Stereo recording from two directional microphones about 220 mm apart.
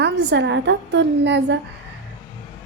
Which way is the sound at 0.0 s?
50° right (ahead or behind).